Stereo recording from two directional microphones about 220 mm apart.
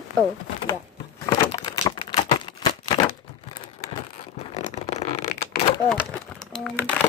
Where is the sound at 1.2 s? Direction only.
15° left (ahead or behind).